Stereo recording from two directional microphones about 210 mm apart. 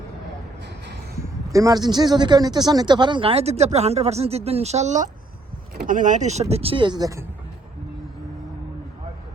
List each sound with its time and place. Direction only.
1.2 s speech: 15° right (ahead or behind)